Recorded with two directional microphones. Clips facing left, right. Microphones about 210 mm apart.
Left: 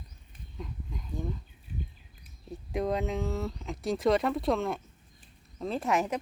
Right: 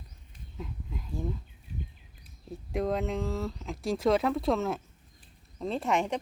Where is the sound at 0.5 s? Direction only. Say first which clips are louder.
Right 1 dB; 5° right (ahead or behind).